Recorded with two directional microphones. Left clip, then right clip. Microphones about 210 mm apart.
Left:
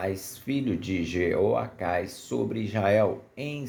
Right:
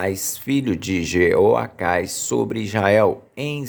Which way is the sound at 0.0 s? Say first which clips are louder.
Right 7 dB; 35° right (ahead or behind).